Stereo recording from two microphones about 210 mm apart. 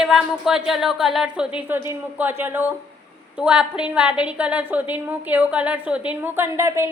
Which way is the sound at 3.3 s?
5° right (ahead or behind).